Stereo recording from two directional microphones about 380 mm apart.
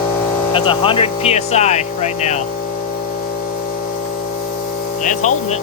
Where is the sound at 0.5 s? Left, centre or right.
Centre.